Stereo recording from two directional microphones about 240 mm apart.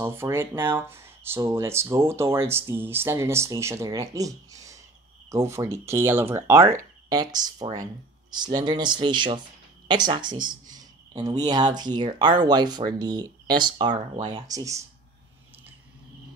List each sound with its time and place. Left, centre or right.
0.0 s speech: centre